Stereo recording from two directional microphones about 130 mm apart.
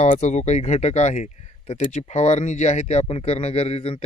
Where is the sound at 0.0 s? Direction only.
60° left (ahead or behind).